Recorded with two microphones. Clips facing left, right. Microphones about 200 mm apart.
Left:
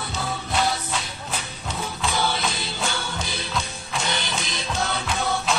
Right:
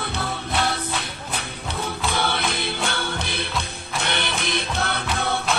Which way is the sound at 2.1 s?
60° right (ahead or behind).